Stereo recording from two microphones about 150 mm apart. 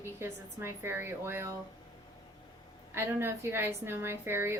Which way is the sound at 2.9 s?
15° right (ahead or behind).